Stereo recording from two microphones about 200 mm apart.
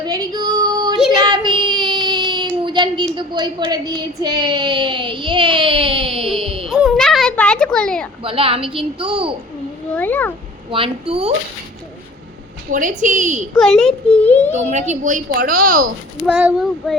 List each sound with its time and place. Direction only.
0.0 s female singing: 20° right (ahead or behind)
1.2 s child singing: 20° right (ahead or behind)
2.6 s a sound: 25° right (ahead or behind)
3.2 s speech: 20° right (ahead or behind)
6.7 s a child's voice: centre (ahead or behind)
8.2 s speech: 25° right (ahead or behind)
9.9 s speech: 10° left (ahead or behind)
10.7 s speech: 25° right (ahead or behind)
12.7 s a woman's voice: 40° right (ahead or behind)
14.5 s a woman's voice: 35° right (ahead or behind)
16.2 s speech: 5° right (ahead or behind)